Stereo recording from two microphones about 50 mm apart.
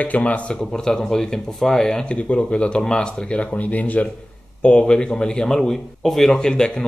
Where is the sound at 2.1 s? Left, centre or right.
Left.